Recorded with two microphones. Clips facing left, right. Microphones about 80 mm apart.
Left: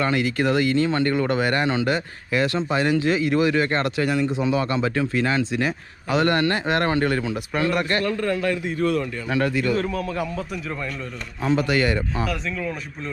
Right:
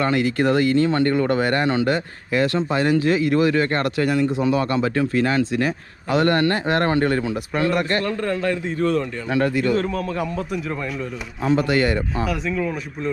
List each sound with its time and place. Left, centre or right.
0.0 s speech: right
3.0 s speech: left
4.8 s speech: right
5.4 s speech: left
6.2 s speech: right
9.7 s a man's voice: centre
11.5 s speech: right
12.2 s a man's voice: centre